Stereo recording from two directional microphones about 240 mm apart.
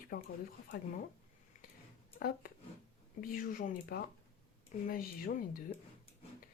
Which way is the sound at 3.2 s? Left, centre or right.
Left.